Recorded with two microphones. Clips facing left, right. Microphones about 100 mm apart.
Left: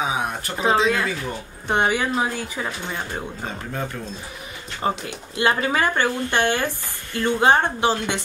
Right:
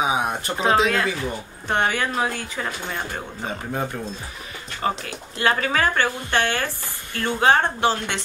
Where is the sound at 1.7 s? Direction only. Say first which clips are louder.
Left 2 dB; 15° left (ahead or behind).